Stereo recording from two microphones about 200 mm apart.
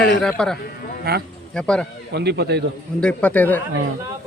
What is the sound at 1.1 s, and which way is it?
Speech, 50° right (ahead or behind).